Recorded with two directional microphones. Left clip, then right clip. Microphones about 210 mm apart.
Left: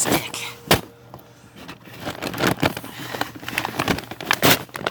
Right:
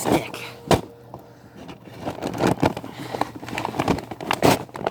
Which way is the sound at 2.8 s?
30° left (ahead or behind).